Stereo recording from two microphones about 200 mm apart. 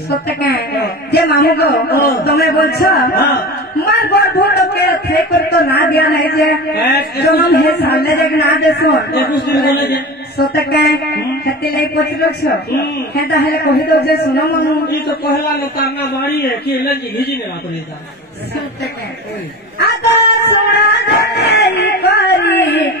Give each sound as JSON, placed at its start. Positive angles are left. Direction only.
{"t": 0.1, "sound": "a man's voice", "side_deg": 55}
{"t": 19.8, "sound": "speech", "side_deg": 55}